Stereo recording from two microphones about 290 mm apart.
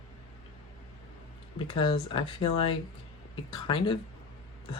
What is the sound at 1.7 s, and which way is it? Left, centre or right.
Speech, centre.